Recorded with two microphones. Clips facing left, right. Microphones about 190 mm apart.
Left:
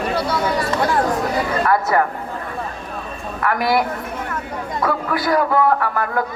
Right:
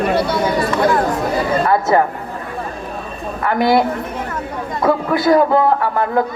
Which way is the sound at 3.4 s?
25° right (ahead or behind).